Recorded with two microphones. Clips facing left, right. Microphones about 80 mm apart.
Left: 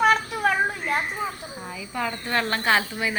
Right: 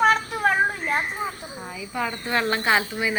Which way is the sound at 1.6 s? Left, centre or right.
Centre.